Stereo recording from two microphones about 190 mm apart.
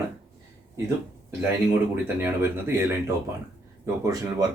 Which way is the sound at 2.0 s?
10° right (ahead or behind).